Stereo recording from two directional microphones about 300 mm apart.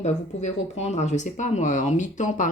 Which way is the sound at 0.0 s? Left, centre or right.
Left.